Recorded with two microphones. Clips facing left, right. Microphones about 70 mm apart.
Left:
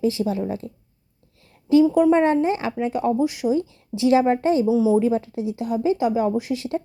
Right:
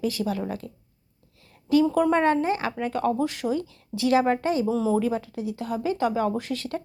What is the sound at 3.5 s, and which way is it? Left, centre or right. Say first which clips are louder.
Speech: left 5 dB; left.